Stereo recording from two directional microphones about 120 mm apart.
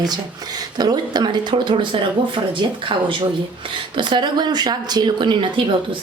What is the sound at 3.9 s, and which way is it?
Speech, 40° right (ahead or behind).